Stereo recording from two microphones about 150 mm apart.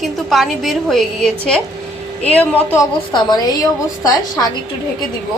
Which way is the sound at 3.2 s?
25° left (ahead or behind).